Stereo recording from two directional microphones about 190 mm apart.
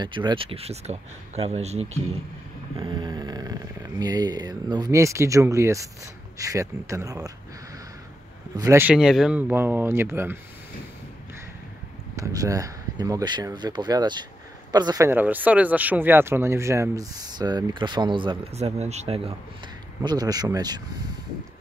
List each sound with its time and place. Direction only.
0.0 s speech: 25° right (ahead or behind)
2.8 s speech: 25° right (ahead or behind)
8.5 s speech: 15° right (ahead or behind)
12.2 s speech: 15° right (ahead or behind)